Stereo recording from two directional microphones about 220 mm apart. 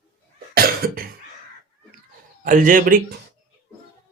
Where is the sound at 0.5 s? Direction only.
40° right (ahead or behind).